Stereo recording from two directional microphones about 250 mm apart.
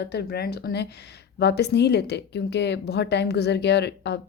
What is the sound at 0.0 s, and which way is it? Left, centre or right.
A woman's voice, left.